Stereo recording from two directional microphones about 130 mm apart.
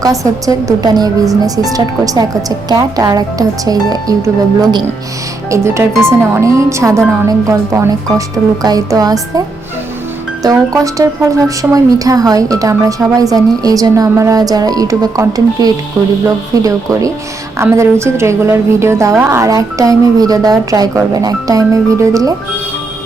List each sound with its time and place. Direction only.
0.0 s a woman's voice: 25° right (ahead or behind)
10.4 s a woman's voice: 25° right (ahead or behind)
16.6 s a woman's voice: 25° right (ahead or behind)